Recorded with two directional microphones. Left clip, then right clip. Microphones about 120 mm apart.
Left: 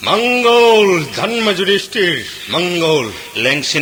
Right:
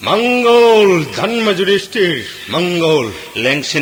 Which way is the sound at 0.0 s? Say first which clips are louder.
Even; 40° left (ahead or behind).